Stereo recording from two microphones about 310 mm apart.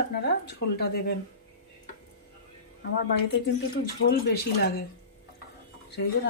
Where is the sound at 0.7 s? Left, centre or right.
Left.